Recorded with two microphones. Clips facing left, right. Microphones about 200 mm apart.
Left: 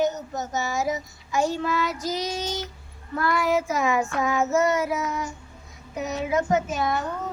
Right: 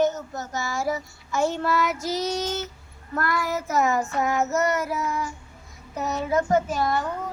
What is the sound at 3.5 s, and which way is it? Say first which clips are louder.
Child singing: even; 90° left.